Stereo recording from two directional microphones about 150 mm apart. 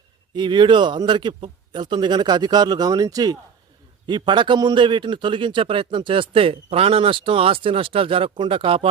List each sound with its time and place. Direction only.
0.3 s a man's voice: 30° right (ahead or behind)